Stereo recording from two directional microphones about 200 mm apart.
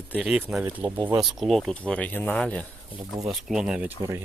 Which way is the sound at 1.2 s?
Centre (ahead or behind).